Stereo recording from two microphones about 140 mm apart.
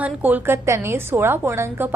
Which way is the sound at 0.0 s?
10° right (ahead or behind).